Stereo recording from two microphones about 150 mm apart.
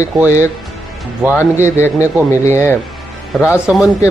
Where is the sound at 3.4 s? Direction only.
5° right (ahead or behind).